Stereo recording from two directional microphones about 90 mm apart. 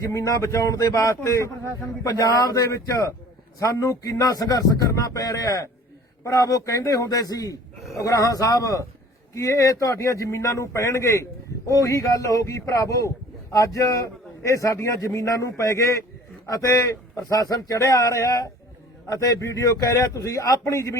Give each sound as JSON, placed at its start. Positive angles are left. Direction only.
{"t": 0.0, "sound": "a man's voice", "side_deg": 35}